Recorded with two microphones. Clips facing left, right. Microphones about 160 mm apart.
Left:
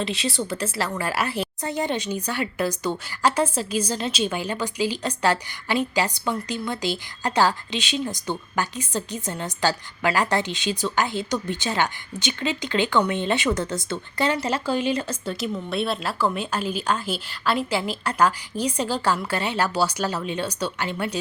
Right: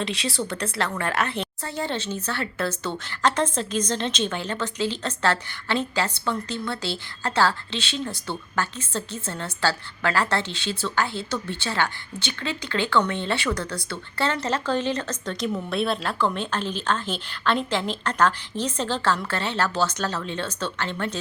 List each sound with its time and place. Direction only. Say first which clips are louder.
0.0 s a woman's voice: left 1 dB; centre (ahead or behind)